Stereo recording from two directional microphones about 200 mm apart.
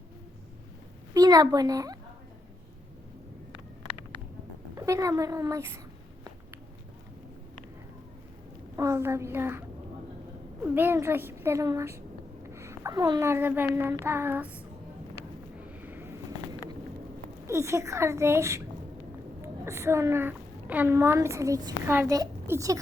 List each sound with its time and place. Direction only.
1.1 s speech: 20° right (ahead or behind)
4.7 s speech: 15° right (ahead or behind)
8.7 s speech: 15° right (ahead or behind)
15.6 s a sound: 10° right (ahead or behind)
17.4 s a woman's voice: 15° right (ahead or behind)